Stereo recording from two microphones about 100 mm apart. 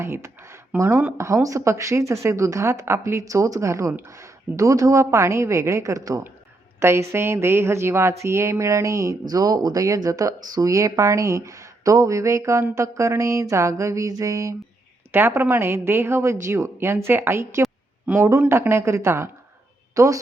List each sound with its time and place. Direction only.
0.0 s a woman's voice: 25° right (ahead or behind)
15.1 s a woman's voice: 20° right (ahead or behind)